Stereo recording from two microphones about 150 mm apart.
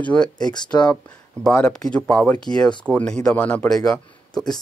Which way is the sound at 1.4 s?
5° left (ahead or behind).